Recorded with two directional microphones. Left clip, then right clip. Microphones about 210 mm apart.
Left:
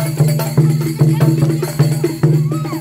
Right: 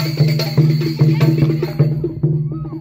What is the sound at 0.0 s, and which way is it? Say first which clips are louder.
Music: left 1 dB; 35° left (ahead or behind).